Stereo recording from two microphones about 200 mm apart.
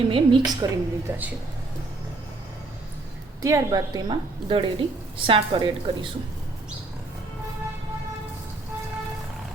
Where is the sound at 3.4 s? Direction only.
15° right (ahead or behind).